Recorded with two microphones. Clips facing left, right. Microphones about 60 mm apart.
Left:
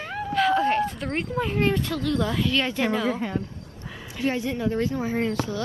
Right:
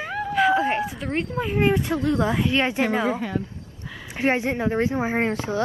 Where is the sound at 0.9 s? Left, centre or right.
Centre.